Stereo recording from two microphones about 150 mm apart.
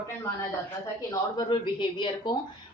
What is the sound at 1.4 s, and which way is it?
Speech, 35° left (ahead or behind).